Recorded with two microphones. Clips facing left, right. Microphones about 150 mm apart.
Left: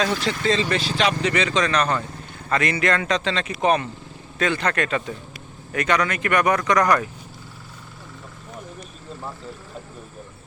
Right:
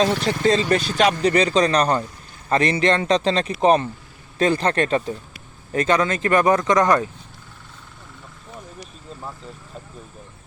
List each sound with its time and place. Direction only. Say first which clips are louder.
0.0 s speech: right 4 dB; 35° right (ahead or behind)